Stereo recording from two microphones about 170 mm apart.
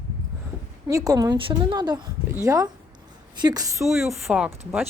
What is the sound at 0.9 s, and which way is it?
A woman's voice, 20° right (ahead or behind).